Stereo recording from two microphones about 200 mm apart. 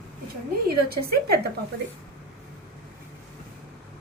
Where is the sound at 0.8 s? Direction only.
50° right (ahead or behind).